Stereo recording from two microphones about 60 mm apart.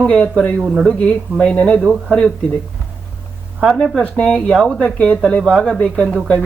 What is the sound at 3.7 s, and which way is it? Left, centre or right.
Speech, centre.